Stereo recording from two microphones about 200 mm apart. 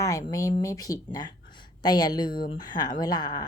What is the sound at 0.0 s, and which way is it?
A woman's voice, 15° left (ahead or behind).